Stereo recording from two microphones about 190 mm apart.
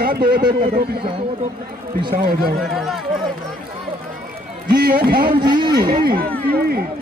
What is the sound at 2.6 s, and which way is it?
Speech, centre (ahead or behind).